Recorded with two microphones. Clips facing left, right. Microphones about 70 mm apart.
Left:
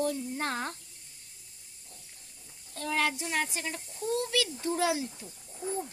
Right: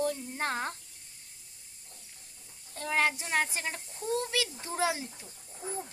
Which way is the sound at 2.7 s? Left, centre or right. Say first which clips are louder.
Right 1 dB; right.